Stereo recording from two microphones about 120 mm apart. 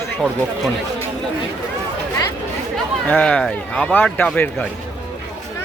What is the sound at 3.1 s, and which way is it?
Speech, 10° left (ahead or behind).